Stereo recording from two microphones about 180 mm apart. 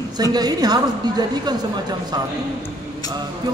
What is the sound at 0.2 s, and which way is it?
A man's voice, 20° right (ahead or behind).